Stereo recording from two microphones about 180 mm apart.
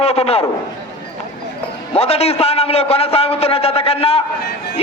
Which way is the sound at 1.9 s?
35° left (ahead or behind).